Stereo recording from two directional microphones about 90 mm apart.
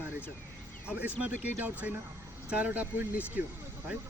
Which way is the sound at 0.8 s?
15° right (ahead or behind).